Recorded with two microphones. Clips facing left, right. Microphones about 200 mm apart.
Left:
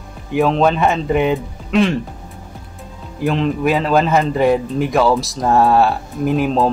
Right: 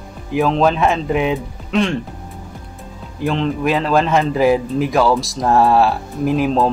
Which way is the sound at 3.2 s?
Centre (ahead or behind).